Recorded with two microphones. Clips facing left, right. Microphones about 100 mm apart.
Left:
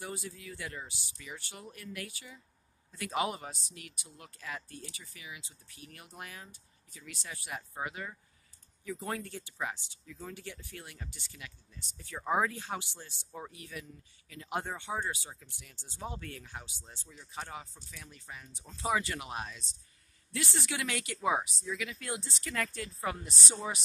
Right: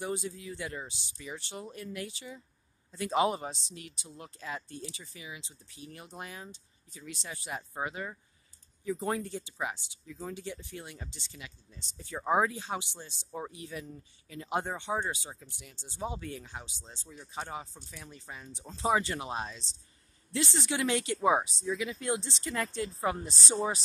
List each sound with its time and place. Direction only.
0.0 s speech: 25° right (ahead or behind)